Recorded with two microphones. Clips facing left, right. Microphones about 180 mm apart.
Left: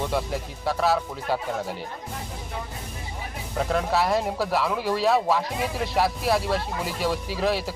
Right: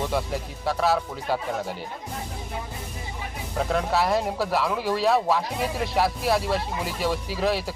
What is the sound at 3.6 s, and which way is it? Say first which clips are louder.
Speech: even; centre (ahead or behind).